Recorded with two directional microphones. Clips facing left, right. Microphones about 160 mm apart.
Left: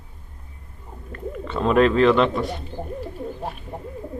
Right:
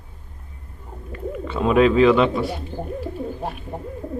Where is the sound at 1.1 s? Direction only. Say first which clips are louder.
Right 1 dB; 5° right (ahead or behind).